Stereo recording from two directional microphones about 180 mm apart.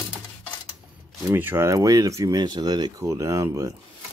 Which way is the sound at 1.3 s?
10° right (ahead or behind).